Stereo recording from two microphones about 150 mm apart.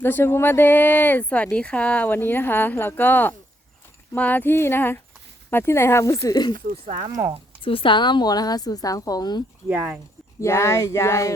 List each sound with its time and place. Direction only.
0.0 s a woman's voice: 15° left (ahead or behind)
7.1 s speech: 25° right (ahead or behind)
7.6 s a woman's voice: 35° left (ahead or behind)
9.6 s speech: 10° right (ahead or behind)
10.4 s speech: 20° left (ahead or behind)